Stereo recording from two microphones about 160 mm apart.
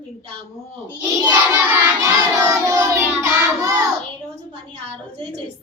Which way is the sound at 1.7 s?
15° right (ahead or behind).